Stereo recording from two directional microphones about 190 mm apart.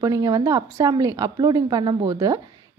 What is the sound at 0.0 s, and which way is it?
A woman's voice, 15° right (ahead or behind).